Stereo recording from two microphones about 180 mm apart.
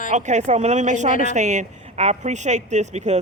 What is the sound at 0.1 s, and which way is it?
Speech, 40° right (ahead or behind).